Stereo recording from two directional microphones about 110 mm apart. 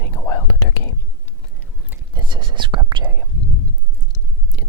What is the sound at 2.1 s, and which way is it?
Whispering, 45° right (ahead or behind).